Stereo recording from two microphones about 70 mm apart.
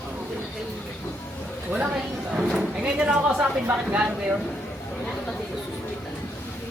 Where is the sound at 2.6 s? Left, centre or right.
Centre.